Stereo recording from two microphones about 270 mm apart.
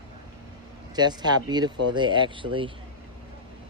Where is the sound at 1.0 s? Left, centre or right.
Centre.